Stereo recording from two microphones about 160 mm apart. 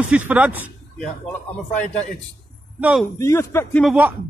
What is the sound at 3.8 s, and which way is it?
Speech, 10° right (ahead or behind).